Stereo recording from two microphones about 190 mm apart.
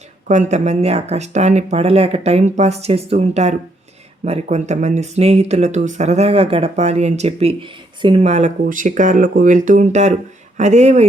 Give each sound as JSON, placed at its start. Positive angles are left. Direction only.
{"t": 0.3, "sound": "speech", "side_deg": -40}